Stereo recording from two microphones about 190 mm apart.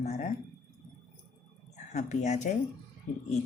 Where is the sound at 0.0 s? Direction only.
35° left (ahead or behind).